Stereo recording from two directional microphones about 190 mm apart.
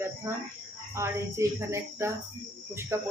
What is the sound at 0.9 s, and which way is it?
Speech, 15° right (ahead or behind).